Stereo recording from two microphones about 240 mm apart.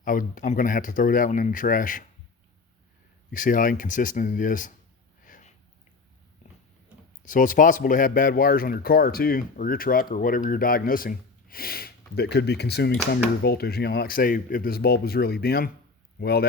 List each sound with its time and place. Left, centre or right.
0.0 s speech: left
3.3 s speech: left
5.2 s a sound: left
7.2 s speech: left